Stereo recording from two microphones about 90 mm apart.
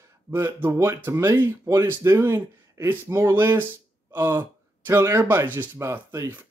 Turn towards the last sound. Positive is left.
turn(degrees=-35)  # may be behind; listen again after turning